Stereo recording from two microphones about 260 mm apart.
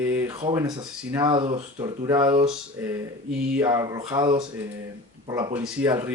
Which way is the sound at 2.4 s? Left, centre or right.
Centre.